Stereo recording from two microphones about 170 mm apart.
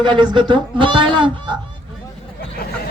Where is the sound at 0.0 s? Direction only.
25° right (ahead or behind).